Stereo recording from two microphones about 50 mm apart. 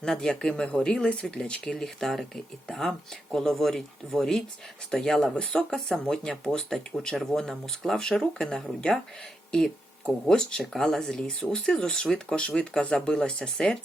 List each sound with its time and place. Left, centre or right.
0.0 s speech: centre
12.4 s speech: left